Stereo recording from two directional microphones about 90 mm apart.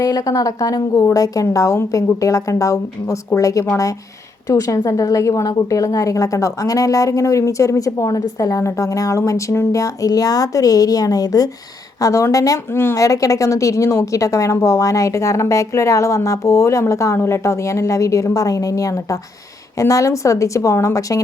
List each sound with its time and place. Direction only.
0.0 s a woman's voice: 40° left (ahead or behind)